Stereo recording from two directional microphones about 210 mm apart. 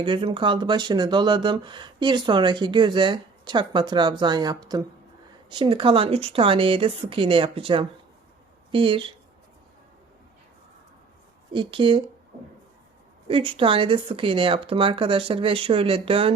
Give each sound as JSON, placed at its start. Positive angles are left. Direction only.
{"t": 0.0, "sound": "speech", "side_deg": -25}
{"t": 11.5, "sound": "speech", "side_deg": -25}
{"t": 13.2, "sound": "speech", "side_deg": -25}